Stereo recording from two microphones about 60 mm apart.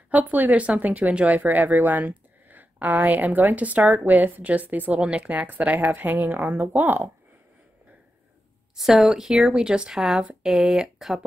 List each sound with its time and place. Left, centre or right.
0.1 s speech: right
8.7 s a woman's voice: centre